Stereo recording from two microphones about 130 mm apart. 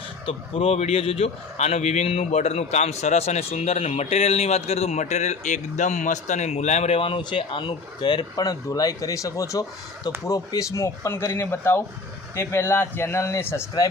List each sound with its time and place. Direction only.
0.3 s a man's voice: 50° left (ahead or behind); by 13.9 s 25° left (ahead or behind)